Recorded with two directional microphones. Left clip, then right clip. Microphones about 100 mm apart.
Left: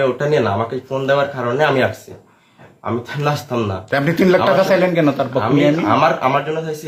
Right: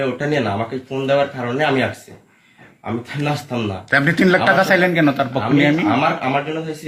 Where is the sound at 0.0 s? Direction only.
50° left (ahead or behind).